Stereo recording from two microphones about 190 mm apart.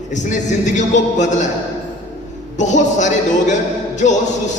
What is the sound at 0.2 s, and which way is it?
A man's voice, 40° left (ahead or behind).